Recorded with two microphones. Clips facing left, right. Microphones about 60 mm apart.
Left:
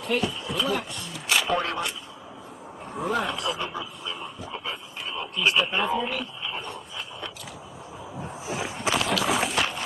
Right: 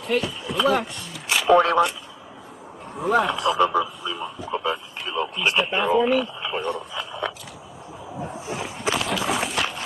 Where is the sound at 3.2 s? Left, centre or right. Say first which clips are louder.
Right 8 dB; right.